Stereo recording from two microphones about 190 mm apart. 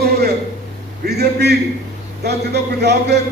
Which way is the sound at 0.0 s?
60° right (ahead or behind).